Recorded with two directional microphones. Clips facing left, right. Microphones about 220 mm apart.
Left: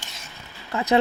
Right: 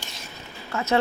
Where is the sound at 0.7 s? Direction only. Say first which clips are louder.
Left 3 dB; 15° left (ahead or behind).